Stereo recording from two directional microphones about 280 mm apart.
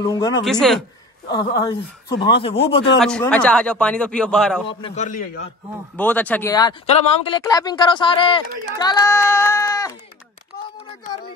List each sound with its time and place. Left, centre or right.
0.0 s speech: centre
0.4 s speech: centre
1.3 s a man's voice: centre
3.0 s speech: centre
4.6 s a man's voice: left
5.9 s speech: centre